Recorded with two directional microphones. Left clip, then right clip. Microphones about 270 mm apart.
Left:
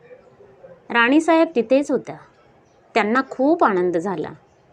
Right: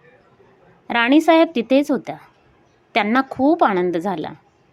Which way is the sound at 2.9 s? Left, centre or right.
Centre.